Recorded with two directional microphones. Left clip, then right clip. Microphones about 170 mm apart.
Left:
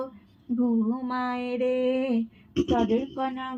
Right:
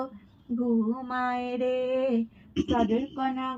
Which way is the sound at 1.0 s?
5° left (ahead or behind).